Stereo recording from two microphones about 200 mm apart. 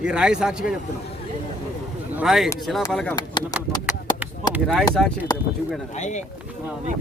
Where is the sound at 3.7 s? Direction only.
20° left (ahead or behind).